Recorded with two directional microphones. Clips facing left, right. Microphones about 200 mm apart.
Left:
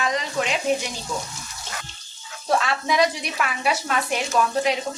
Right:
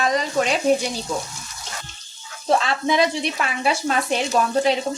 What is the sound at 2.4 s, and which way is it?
Speech, 25° right (ahead or behind).